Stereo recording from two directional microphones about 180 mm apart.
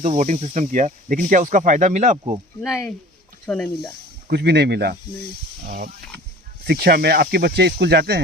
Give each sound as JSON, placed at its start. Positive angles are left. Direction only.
{"t": 0.0, "sound": "speech", "side_deg": -40}
{"t": 2.6, "sound": "speech", "side_deg": 0}
{"t": 4.3, "sound": "speech", "side_deg": -65}
{"t": 5.6, "sound": "speech", "side_deg": -50}